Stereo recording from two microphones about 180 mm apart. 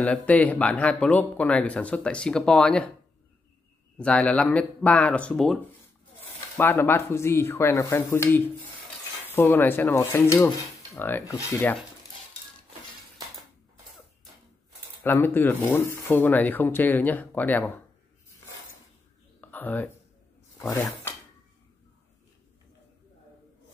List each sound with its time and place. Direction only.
0.0 s speech: 10° left (ahead or behind)
4.0 s speech: 5° left (ahead or behind)
15.0 s speech: 10° left (ahead or behind)
19.4 s a sound: 10° left (ahead or behind)
20.5 s speech: 20° left (ahead or behind)